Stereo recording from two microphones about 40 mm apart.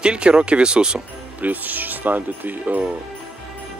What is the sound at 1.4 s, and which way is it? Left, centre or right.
Speech, right.